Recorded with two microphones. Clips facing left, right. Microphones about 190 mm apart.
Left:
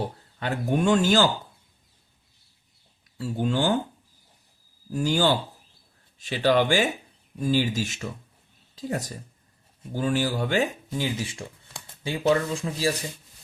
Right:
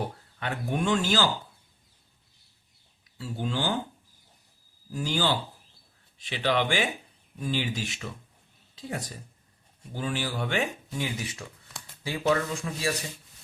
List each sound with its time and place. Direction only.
0.0 s speech: 35° left (ahead or behind)
3.2 s speech: 50° left (ahead or behind)
4.9 s speech: 45° left (ahead or behind); by 12.9 s 30° left (ahead or behind)